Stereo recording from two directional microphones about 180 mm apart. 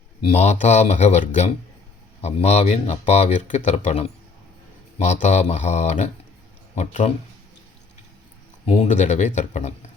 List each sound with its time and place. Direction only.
0.2 s speech: 35° left (ahead or behind)
5.2 s speech: 40° left (ahead or behind)
8.6 s speech: 40° left (ahead or behind)